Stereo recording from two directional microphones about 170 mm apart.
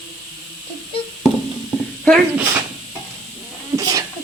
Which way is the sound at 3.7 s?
20° right (ahead or behind).